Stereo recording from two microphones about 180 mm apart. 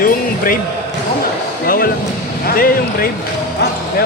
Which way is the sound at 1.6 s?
55° left (ahead or behind).